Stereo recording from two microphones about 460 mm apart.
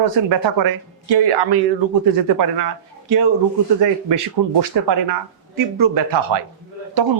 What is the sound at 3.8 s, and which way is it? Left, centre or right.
Speech, right.